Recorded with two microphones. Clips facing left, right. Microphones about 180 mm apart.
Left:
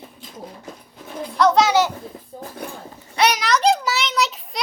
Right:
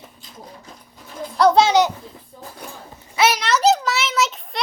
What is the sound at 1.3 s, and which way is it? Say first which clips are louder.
Speech: right 2 dB; 30° right (ahead or behind).